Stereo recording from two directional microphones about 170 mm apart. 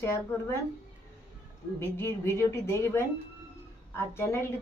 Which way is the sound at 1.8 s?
15° left (ahead or behind).